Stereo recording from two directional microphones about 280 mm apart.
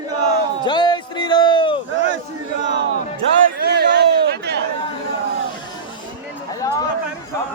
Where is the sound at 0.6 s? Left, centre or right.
Centre.